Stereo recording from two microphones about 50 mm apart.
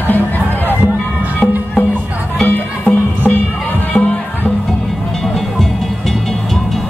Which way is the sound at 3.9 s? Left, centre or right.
Left.